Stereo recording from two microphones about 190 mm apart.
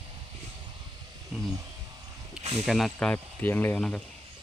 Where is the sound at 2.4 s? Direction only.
35° right (ahead or behind).